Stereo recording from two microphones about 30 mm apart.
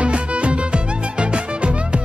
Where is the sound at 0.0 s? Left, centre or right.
Right.